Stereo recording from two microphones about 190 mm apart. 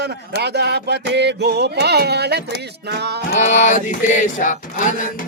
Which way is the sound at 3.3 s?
40° left (ahead or behind).